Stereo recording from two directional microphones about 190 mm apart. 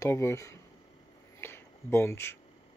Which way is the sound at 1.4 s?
15° left (ahead or behind).